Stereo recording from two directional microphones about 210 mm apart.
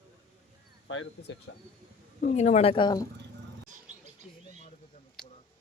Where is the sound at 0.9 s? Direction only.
70° left (ahead or behind).